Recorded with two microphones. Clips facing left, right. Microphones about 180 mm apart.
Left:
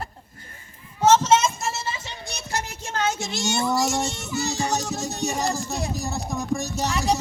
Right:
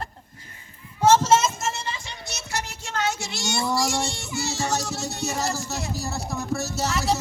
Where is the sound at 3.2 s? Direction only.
20° left (ahead or behind).